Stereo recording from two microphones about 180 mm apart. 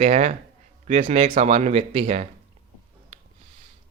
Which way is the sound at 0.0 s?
40° right (ahead or behind).